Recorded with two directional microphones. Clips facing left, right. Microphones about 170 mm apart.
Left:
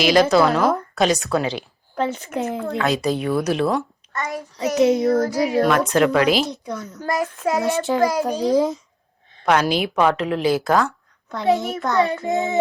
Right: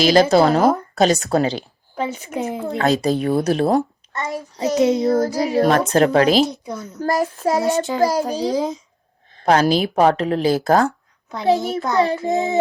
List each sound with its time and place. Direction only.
0.0 s a woman's voice: 35° right (ahead or behind)
2.0 s speech: 10° right (ahead or behind)
2.7 s a woman's voice: 40° right (ahead or behind)
4.1 s child singing: 25° right (ahead or behind)
5.4 s a woman's voice: 30° right (ahead or behind)
6.7 s child singing: 20° right (ahead or behind)
7.0 s a woman's voice: 35° right (ahead or behind)
7.9 s a child's voice: centre (ahead or behind)
9.3 s a woman's voice: 35° right (ahead or behind)